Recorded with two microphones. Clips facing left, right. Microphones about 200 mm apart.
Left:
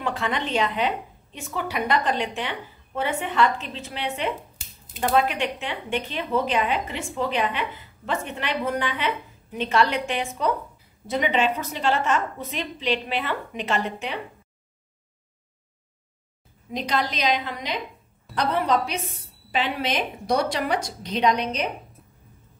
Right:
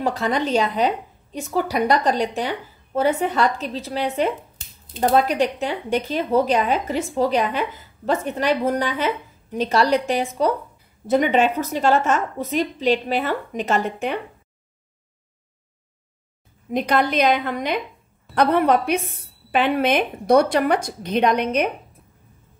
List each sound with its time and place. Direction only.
0.0 s a woman's voice: 40° right (ahead or behind)
16.7 s a woman's voice: 55° right (ahead or behind)